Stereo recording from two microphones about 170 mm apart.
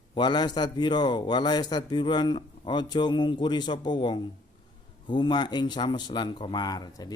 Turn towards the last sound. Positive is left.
turn(degrees=25)  # may be behind; listen again after turning